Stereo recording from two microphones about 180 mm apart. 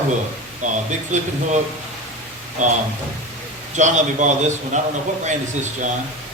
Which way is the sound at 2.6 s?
40° right (ahead or behind).